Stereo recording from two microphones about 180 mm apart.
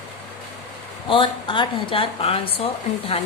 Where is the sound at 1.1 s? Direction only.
25° left (ahead or behind).